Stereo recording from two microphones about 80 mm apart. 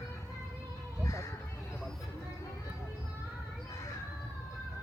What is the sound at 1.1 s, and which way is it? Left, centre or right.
Music, left.